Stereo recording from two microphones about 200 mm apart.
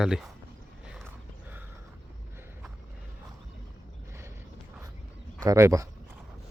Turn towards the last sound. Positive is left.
turn(degrees=-15)  # may be behind; listen again after turning